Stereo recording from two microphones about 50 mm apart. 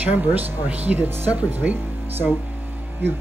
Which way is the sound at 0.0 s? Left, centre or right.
Right.